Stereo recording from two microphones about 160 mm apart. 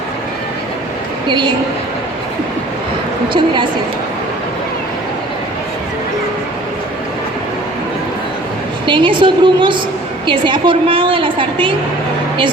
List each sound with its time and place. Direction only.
1.3 s a woman's voice: 30° right (ahead or behind)
3.3 s a woman's voice: 30° right (ahead or behind)
8.9 s a woman's voice: 30° right (ahead or behind)